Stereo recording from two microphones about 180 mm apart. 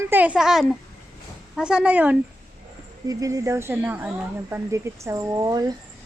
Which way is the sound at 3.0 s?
20° right (ahead or behind).